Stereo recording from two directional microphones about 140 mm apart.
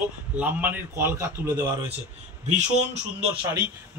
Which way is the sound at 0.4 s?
10° right (ahead or behind).